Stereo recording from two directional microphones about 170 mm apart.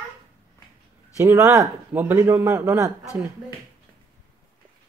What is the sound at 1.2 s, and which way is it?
A man's voice, 15° right (ahead or behind).